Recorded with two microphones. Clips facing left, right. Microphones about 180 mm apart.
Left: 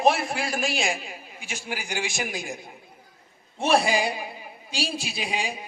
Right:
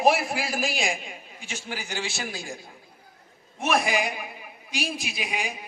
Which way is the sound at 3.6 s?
30° left (ahead or behind).